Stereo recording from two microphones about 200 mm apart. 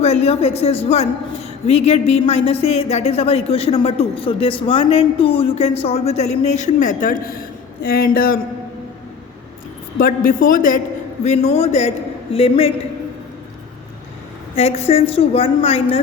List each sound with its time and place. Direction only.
0.0 s speech: 30° left (ahead or behind); by 8.4 s 45° left (ahead or behind)
10.0 s a man's voice: 45° left (ahead or behind)
11.2 s a woman's voice: 30° left (ahead or behind)
14.5 s a woman's voice: 30° left (ahead or behind)